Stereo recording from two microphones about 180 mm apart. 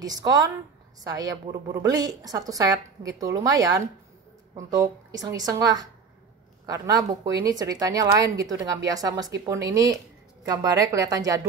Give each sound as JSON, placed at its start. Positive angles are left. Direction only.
{"t": 0.0, "sound": "a woman's voice", "side_deg": -20}